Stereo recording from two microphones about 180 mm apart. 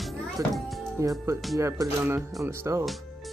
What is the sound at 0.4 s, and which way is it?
Speech, 20° right (ahead or behind).